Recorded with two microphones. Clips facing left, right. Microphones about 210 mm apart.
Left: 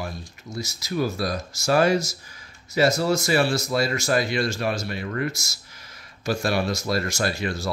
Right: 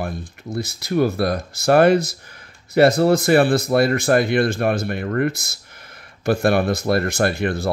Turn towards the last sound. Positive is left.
turn(degrees=-55)  # may be behind; listen again after turning